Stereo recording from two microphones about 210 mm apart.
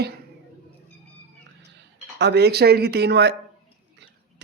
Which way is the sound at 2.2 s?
50° right (ahead or behind).